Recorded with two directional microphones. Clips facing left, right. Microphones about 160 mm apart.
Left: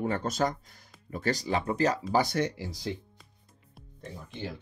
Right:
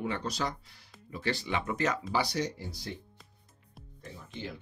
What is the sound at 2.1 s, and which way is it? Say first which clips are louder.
Speech: left 4 dB; 50° left (ahead or behind).